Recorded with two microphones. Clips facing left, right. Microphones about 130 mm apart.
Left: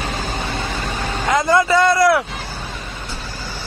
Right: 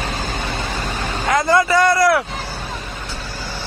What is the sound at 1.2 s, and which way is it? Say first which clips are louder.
Vehicle: even; 20° left (ahead or behind).